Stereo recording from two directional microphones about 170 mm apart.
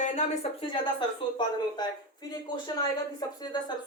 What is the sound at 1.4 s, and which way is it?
Speech, 25° left (ahead or behind).